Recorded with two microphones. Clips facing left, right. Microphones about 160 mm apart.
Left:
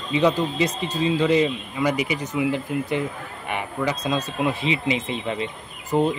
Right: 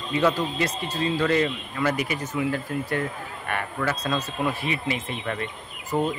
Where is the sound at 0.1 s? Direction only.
15° left (ahead or behind).